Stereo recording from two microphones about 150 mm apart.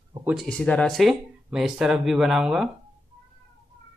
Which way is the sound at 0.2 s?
5° right (ahead or behind).